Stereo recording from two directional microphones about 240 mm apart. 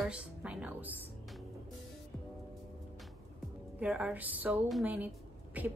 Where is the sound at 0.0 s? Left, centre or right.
Centre.